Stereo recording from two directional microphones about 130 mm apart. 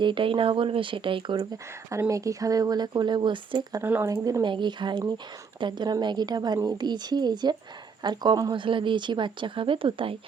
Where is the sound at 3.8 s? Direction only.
20° right (ahead or behind).